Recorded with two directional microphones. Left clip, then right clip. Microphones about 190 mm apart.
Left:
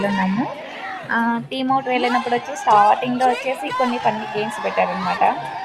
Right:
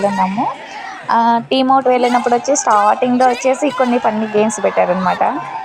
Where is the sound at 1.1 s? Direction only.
30° right (ahead or behind).